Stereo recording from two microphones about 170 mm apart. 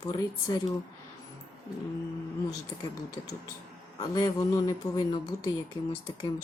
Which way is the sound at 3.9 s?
20° left (ahead or behind).